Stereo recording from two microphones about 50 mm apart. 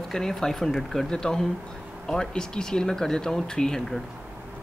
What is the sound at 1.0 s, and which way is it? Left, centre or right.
Speech, centre.